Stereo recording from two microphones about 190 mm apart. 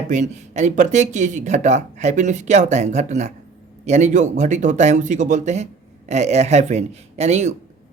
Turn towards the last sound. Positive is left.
turn(degrees=-35)  # may be behind; listen again after turning